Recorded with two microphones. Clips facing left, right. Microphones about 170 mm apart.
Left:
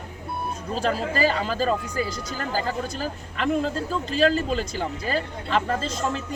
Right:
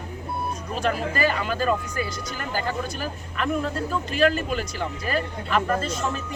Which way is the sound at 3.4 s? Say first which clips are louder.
Left 2 dB; 30° left (ahead or behind).